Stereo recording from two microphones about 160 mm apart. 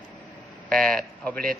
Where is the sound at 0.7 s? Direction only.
5° left (ahead or behind).